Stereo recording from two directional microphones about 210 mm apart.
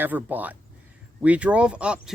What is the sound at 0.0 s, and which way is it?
Speech, 10° right (ahead or behind).